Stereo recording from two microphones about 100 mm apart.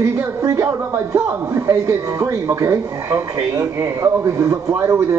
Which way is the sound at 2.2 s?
30° right (ahead or behind).